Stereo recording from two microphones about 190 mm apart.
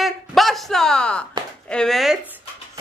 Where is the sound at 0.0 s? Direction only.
Centre (ahead or behind).